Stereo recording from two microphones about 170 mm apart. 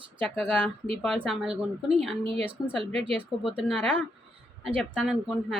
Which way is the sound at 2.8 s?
35° right (ahead or behind).